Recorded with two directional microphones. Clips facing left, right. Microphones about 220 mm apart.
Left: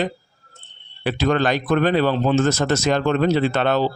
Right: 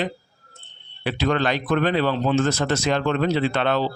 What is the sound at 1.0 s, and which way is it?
A man's voice, 45° left (ahead or behind).